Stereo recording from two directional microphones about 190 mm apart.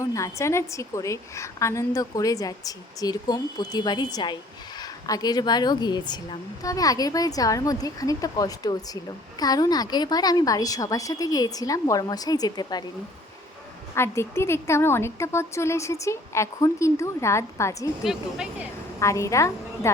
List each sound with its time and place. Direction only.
0.0 s a woman's voice: 15° left (ahead or behind)
13.9 s a woman's voice: 15° left (ahead or behind)
18.0 s speech: 5° right (ahead or behind)
18.9 s a woman's voice: 15° left (ahead or behind)